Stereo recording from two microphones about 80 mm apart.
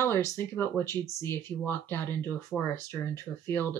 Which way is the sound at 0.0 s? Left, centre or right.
Left.